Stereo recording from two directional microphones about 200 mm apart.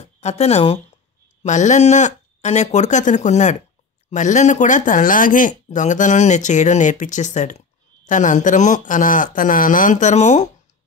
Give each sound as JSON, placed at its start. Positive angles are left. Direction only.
{"t": 0.0, "sound": "speech", "side_deg": 35}